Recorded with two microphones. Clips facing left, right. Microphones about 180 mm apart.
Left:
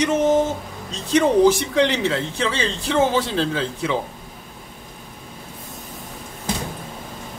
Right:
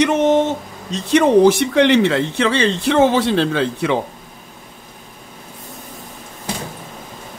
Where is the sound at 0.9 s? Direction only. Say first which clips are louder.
Right 4 dB; 65° right (ahead or behind).